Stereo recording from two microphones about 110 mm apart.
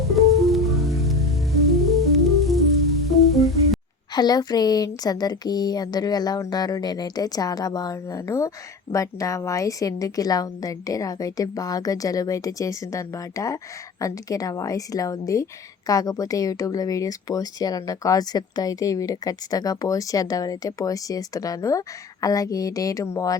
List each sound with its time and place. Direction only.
0.1 s music: centre (ahead or behind)
4.1 s speech: 40° left (ahead or behind)